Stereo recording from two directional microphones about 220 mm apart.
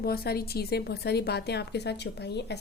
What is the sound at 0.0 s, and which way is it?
A woman's voice, 45° left (ahead or behind).